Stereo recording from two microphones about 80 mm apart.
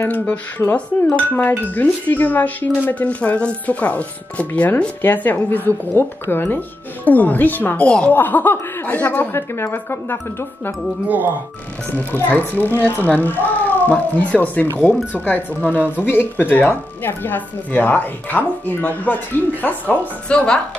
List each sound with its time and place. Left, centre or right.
0.1 s speech: left
11.1 s speech: right
11.9 s speech: left